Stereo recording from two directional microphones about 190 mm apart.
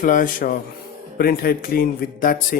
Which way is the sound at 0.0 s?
45° left (ahead or behind).